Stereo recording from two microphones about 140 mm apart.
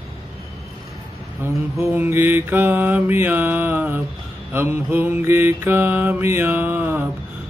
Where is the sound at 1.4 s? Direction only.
15° right (ahead or behind).